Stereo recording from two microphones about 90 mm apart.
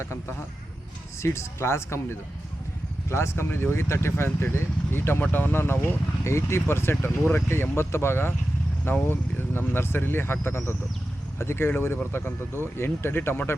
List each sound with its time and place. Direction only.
0.0 s speech: 30° left (ahead or behind)